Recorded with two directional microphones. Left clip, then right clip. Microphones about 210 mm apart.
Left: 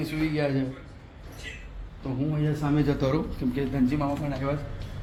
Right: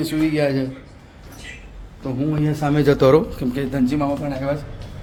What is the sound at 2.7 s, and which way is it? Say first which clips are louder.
Speech: right 13 dB; 55° right (ahead or behind).